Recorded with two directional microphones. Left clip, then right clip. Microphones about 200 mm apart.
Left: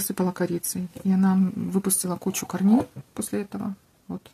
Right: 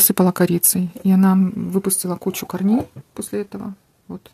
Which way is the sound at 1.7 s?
30° right (ahead or behind).